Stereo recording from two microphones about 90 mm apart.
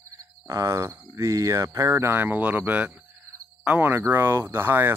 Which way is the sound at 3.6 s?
15° right (ahead or behind).